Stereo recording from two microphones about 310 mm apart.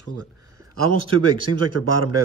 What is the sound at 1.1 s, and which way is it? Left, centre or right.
Speech, centre.